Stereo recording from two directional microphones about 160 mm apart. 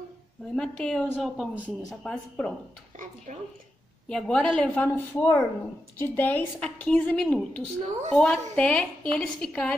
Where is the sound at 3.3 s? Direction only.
50° right (ahead or behind).